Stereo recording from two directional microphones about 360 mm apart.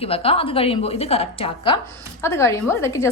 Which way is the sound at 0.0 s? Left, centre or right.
Centre.